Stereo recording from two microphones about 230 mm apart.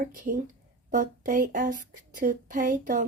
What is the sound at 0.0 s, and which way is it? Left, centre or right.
Speech, right.